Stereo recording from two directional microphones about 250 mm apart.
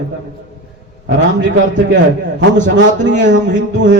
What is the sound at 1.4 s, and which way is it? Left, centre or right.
A man's voice, right.